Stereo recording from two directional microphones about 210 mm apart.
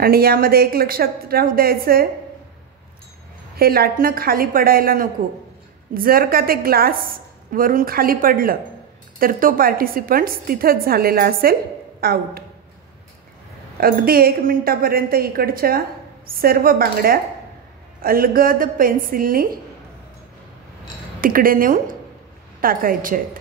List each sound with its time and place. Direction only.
0.0 s a woman's voice: 45° right (ahead or behind)
3.5 s a woman's voice: 45° right (ahead or behind)
13.7 s a woman's voice: 45° right (ahead or behind)
21.2 s a woman's voice: 45° right (ahead or behind)